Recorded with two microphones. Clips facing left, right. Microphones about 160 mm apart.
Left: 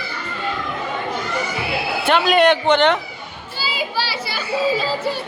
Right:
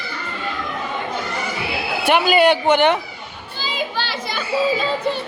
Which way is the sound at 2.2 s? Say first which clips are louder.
Left 1 dB; 5° right (ahead or behind).